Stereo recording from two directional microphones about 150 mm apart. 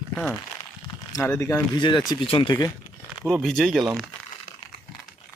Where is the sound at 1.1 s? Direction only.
20° left (ahead or behind).